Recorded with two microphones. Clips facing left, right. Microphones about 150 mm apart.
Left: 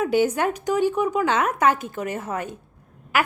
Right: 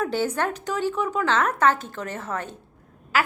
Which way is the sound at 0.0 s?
10° left (ahead or behind).